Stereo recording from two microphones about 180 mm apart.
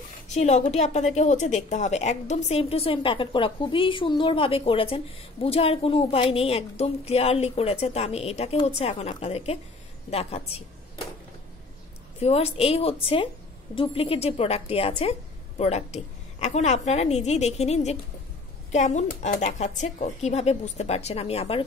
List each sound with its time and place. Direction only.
0.3 s a woman's voice: 40° left (ahead or behind)
12.2 s a woman's voice: 35° left (ahead or behind)